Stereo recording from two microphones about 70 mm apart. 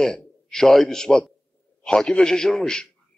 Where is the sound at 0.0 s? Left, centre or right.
Centre.